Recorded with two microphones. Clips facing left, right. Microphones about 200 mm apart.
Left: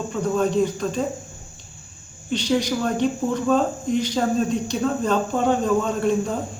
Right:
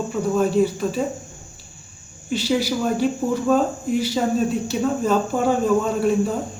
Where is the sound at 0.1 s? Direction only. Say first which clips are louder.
Right 1 dB; 5° right (ahead or behind).